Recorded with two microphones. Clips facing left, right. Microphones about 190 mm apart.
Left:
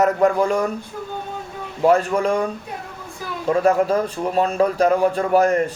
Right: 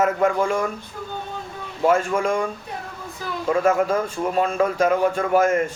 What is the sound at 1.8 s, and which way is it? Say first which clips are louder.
A man's voice: left 3 dB; 35° left (ahead or behind).